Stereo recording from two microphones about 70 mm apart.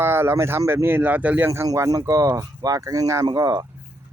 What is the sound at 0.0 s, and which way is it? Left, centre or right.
Speech, right.